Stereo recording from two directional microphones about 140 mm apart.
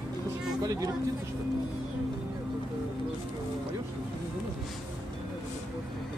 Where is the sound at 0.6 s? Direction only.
25° right (ahead or behind).